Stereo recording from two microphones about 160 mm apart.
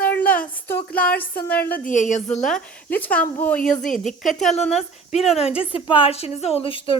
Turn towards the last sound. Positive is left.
turn(degrees=35)  # may be behind; listen again after turning